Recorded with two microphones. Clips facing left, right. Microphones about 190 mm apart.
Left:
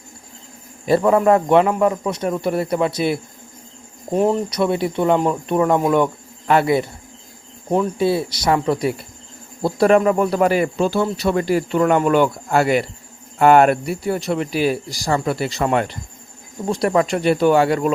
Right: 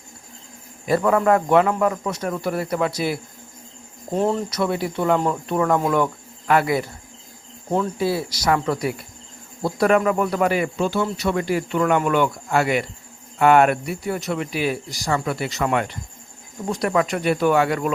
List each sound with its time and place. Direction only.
0.9 s a man's voice: 25° left (ahead or behind)